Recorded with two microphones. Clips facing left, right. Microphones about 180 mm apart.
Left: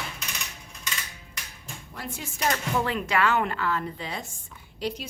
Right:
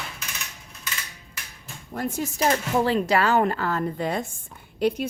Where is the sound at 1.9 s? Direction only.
45° right (ahead or behind).